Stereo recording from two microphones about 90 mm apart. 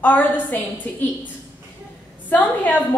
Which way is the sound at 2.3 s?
20° left (ahead or behind).